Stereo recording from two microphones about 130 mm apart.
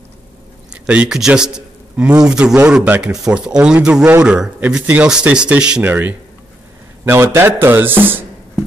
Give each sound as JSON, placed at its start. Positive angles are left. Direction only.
{"t": 0.8, "sound": "a man's voice", "side_deg": -5}